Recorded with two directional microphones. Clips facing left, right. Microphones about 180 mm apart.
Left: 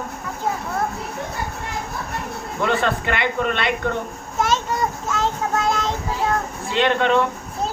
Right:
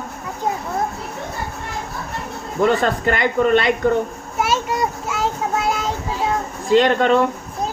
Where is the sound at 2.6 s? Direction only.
40° right (ahead or behind).